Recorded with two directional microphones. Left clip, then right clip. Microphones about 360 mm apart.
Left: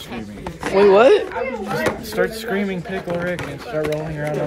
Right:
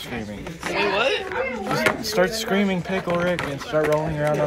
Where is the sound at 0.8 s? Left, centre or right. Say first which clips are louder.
Left 10 dB; centre.